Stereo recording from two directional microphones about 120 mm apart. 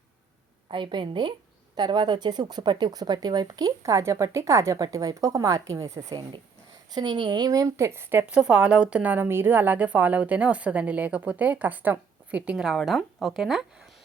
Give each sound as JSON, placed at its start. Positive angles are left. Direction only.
{"t": 0.7, "sound": "a woman's voice", "side_deg": -40}
{"t": 6.9, "sound": "a woman's voice", "side_deg": -40}